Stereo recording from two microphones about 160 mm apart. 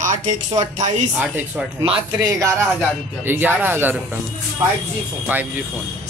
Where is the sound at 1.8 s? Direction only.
35° right (ahead or behind).